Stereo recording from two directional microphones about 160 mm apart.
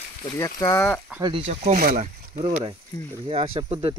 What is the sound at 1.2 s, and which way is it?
Speech, 35° right (ahead or behind).